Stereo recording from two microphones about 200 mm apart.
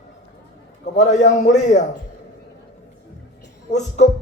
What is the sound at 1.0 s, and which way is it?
Speech, 35° left (ahead or behind).